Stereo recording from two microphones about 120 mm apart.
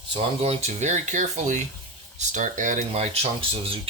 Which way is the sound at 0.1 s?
60° right (ahead or behind).